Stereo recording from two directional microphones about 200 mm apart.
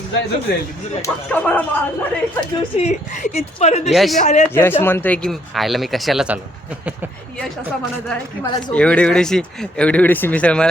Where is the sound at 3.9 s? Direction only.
Centre (ahead or behind).